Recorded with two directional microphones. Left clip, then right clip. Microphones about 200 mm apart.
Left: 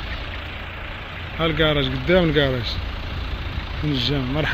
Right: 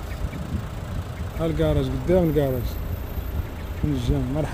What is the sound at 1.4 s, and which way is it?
Speech, 15° right (ahead or behind).